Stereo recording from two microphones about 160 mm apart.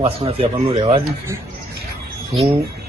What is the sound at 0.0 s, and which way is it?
Speech, 35° right (ahead or behind).